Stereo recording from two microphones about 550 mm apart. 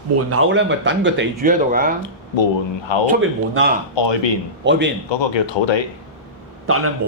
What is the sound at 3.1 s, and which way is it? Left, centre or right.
Speech, centre.